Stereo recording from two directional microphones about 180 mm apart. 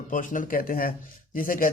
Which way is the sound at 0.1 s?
45° left (ahead or behind).